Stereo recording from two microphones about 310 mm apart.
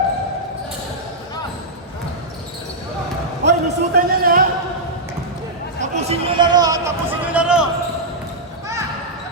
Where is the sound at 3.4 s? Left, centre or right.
Right.